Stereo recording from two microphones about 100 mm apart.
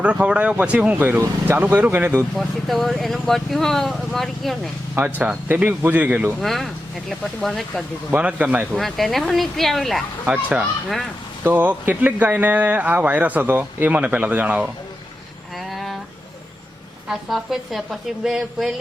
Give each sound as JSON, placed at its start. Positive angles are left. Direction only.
{"t": 0.0, "sound": "speech", "side_deg": -10}
{"t": 2.3, "sound": "speech", "side_deg": 0}
{"t": 4.9, "sound": "speech", "side_deg": -15}
{"t": 6.4, "sound": "speech", "side_deg": 0}
{"t": 8.1, "sound": "speech", "side_deg": -15}
{"t": 8.7, "sound": "speech", "side_deg": 0}
{"t": 10.2, "sound": "speech", "side_deg": -15}
{"t": 10.6, "sound": "speech", "side_deg": 0}
{"t": 11.4, "sound": "speech", "side_deg": -15}
{"t": 15.5, "sound": "a sound", "side_deg": 0}
{"t": 17.1, "sound": "speech", "side_deg": -5}